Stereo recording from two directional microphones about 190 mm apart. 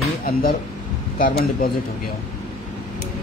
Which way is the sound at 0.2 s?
50° left (ahead or behind).